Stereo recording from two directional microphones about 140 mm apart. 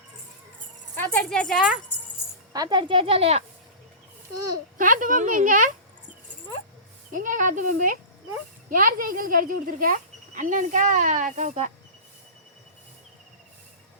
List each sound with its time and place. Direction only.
0.9 s speech: 10° left (ahead or behind)
2.5 s a woman's voice: 30° right (ahead or behind); by 3.4 s 45° right (ahead or behind)
4.8 s speech: 70° right (ahead or behind)
7.1 s speech: 70° right (ahead or behind)
8.7 s speech: 85° right; by 11.7 s 55° right (ahead or behind)